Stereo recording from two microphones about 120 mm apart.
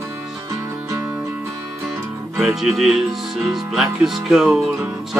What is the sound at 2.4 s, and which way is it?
Speech, centre (ahead or behind).